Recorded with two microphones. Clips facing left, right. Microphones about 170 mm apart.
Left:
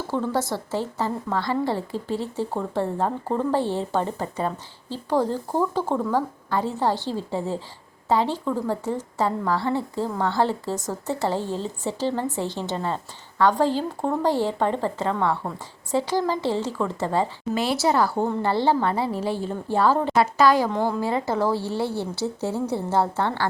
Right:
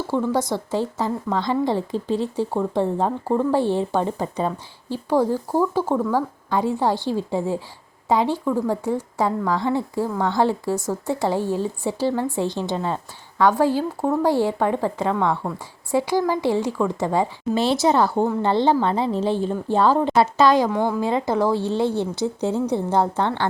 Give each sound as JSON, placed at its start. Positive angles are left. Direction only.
{"t": 0.1, "sound": "a woman's voice", "side_deg": -15}
{"t": 17.5, "sound": "speech", "side_deg": -25}